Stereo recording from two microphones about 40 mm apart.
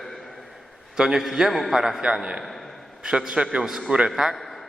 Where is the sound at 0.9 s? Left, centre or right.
Centre.